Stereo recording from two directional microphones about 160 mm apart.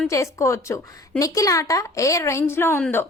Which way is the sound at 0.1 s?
20° left (ahead or behind).